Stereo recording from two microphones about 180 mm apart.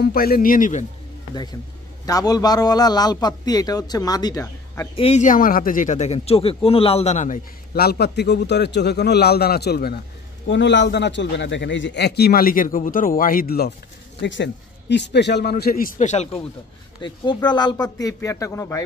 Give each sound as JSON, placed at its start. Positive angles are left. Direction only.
{"t": 0.0, "sound": "speech", "side_deg": 55}
{"t": 2.0, "sound": "a man's voice", "side_deg": 20}
{"t": 4.9, "sound": "a man's voice", "side_deg": 35}
{"t": 7.7, "sound": "a man's voice", "side_deg": 60}
{"t": 10.5, "sound": "a man's voice", "side_deg": 80}
{"t": 14.2, "sound": "a man's voice", "side_deg": 80}
{"t": 17.0, "sound": "a man's voice", "side_deg": 25}